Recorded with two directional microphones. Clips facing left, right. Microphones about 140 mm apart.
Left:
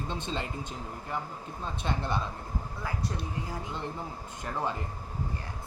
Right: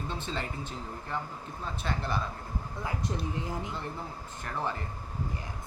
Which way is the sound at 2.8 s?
20° right (ahead or behind).